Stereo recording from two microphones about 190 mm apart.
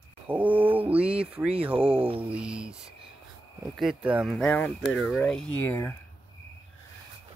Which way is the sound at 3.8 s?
5° right (ahead or behind).